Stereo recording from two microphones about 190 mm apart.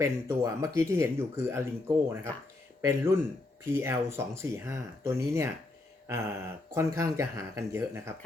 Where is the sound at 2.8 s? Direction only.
15° right (ahead or behind).